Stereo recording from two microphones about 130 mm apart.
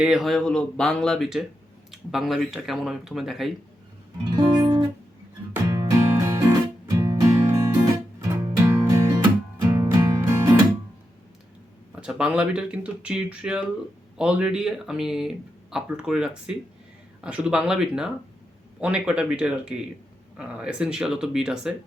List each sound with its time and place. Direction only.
0.0 s speech: 5° right (ahead or behind)
4.2 s music: 35° right (ahead or behind)
11.9 s speech: 5° right (ahead or behind)